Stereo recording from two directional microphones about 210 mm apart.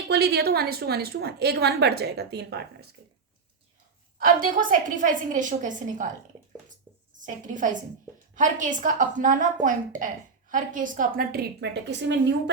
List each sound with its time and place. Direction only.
0.1 s a woman's voice: 50° right (ahead or behind)
4.2 s a woman's voice: 40° right (ahead or behind)
6.7 s a sound: 40° right (ahead or behind)
8.4 s a woman's voice: 35° right (ahead or behind); by 12.3 s 55° right (ahead or behind)